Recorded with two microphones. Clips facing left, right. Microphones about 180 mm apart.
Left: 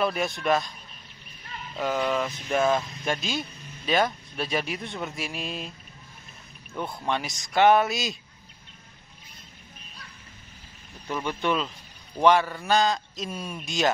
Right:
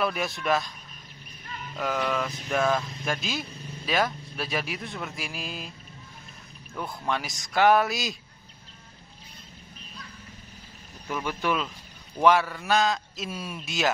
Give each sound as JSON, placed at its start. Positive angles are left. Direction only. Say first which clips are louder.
{"t": 0.0, "sound": "speech", "louder": "left 2 dB", "side_deg": 0}
{"t": 1.8, "sound": "speech", "louder": "left 2 dB", "side_deg": 0}
{"t": 6.9, "sound": "speech", "louder": "even", "side_deg": 0}
{"t": 11.1, "sound": "speech", "louder": "left 1 dB", "side_deg": -5}